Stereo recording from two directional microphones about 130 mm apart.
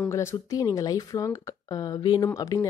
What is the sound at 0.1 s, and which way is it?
Speech, 20° left (ahead or behind).